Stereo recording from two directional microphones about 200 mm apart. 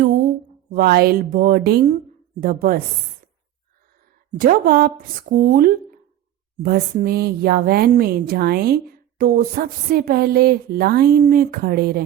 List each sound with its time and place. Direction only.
0.0 s a sound: 45° right (ahead or behind)
0.7 s speech: 50° right (ahead or behind)
4.3 s speech: 45° right (ahead or behind)